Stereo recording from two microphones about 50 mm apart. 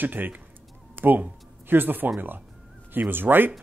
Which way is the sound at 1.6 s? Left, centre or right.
Right.